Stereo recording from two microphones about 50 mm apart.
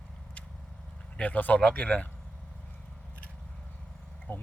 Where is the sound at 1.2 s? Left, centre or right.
Left.